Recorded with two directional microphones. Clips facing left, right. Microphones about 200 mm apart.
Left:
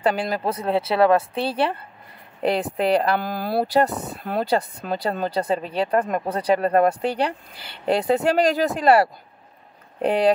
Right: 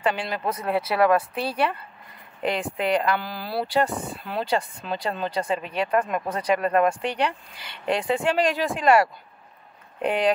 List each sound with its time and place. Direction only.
0.0 s speech: 40° left (ahead or behind)